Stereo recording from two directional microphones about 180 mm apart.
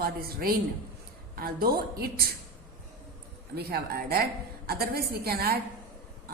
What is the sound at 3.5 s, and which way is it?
A woman's voice, 60° right (ahead or behind).